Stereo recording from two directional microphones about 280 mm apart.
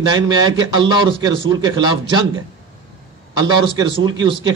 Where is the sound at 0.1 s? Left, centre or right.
Centre.